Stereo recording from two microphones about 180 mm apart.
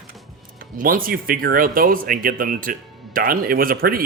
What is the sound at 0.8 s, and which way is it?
Speech, 50° right (ahead or behind).